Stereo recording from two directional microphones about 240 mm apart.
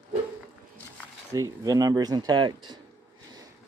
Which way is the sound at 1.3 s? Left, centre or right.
Centre.